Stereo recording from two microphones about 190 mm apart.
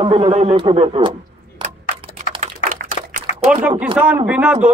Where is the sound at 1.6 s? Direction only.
25° right (ahead or behind).